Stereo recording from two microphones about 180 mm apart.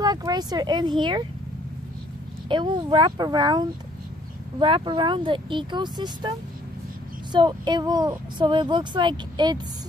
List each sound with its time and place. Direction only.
0.0 s speech: 20° right (ahead or behind)
2.4 s speech: 25° right (ahead or behind)
7.3 s speech: 25° right (ahead or behind)